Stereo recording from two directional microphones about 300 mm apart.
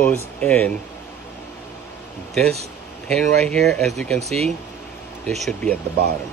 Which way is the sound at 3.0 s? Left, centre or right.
Centre.